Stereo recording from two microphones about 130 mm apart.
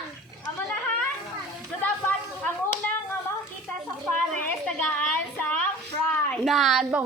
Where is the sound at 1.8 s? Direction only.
15° left (ahead or behind).